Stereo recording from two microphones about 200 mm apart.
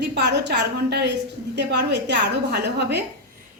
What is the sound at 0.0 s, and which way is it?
A woman's voice, 60° right (ahead or behind).